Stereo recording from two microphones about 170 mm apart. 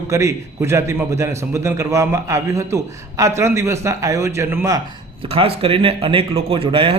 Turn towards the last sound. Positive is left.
turn(degrees=-30)  # may be behind; listen again after turning